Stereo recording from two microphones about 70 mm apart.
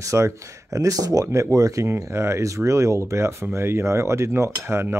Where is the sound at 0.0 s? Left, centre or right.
Right.